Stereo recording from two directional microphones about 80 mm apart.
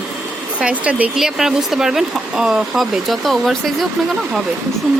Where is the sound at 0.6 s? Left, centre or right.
Centre.